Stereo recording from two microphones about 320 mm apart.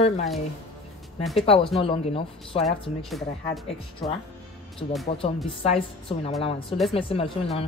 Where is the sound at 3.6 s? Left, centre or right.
Centre.